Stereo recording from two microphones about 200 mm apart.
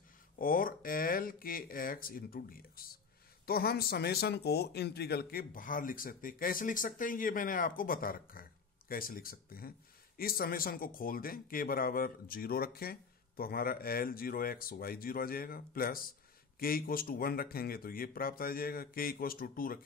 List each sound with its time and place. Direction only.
0.4 s speech: 45° left (ahead or behind)